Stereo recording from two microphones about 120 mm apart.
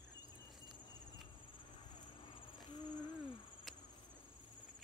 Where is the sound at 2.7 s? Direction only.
35° left (ahead or behind).